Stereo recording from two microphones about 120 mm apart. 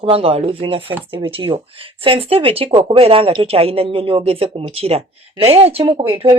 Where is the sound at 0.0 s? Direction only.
50° right (ahead or behind).